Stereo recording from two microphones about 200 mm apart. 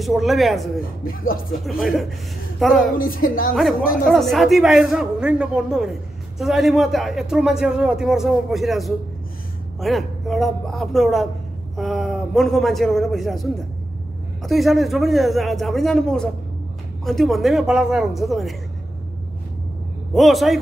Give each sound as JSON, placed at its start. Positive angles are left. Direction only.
{"t": 0.0, "sound": "speech", "side_deg": 0}
{"t": 3.0, "sound": "speech", "side_deg": 45}
{"t": 4.0, "sound": "a man's voice", "side_deg": 0}
{"t": 20.2, "sound": "speech", "side_deg": 0}